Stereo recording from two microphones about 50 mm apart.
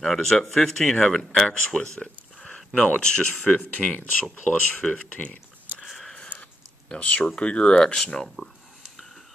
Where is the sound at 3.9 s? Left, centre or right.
Left.